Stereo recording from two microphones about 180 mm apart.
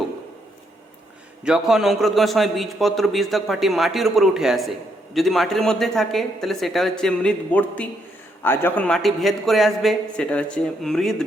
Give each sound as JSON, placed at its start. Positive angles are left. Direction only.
{"t": 1.5, "sound": "a man's voice", "side_deg": -5}